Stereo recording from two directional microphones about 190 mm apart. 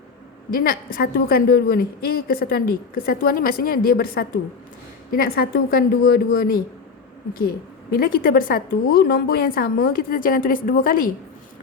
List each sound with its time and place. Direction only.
0.5 s a woman's voice: 50° left (ahead or behind)